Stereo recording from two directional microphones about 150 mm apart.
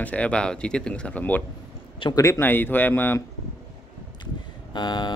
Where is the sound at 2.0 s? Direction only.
30° left (ahead or behind).